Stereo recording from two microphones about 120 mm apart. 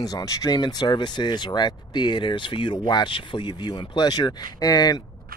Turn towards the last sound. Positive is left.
turn(degrees=35)  # may be behind; listen again after turning